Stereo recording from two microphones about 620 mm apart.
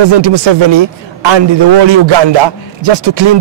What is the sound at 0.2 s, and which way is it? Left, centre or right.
A man's voice, right.